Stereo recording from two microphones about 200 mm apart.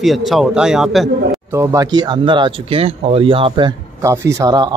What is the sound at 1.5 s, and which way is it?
Speech, 15° right (ahead or behind).